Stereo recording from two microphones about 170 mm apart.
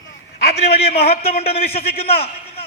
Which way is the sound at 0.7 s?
70° left (ahead or behind).